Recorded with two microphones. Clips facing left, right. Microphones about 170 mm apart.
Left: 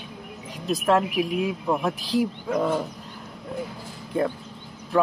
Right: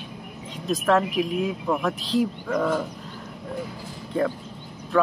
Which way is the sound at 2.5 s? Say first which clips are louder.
Even; 25° left (ahead or behind).